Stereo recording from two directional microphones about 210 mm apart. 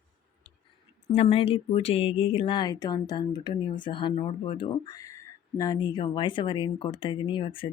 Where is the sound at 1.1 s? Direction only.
25° left (ahead or behind).